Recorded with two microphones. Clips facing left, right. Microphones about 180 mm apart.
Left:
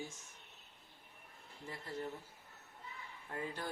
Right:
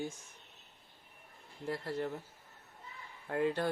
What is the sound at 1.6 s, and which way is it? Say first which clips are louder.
Speech: right 8 dB; 70° right (ahead or behind).